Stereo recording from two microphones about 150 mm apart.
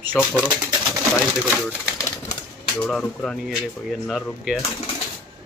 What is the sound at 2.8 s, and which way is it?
Speech, 5° left (ahead or behind).